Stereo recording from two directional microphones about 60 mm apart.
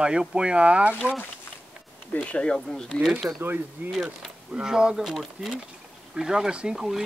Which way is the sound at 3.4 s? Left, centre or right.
Right.